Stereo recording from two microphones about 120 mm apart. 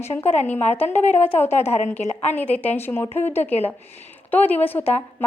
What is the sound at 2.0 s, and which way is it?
Speech, 70° left (ahead or behind).